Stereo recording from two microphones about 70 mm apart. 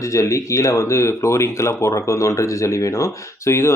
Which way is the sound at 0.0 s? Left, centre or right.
Left.